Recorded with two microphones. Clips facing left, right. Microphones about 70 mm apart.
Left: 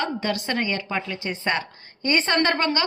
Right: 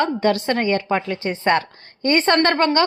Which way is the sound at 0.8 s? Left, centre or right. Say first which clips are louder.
Right 7 dB; right.